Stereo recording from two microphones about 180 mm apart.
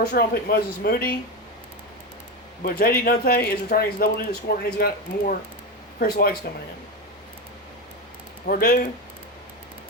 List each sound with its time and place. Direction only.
0.0 s speech: 60° left (ahead or behind)
2.6 s speech: 55° left (ahead or behind)
8.4 s speech: 55° left (ahead or behind)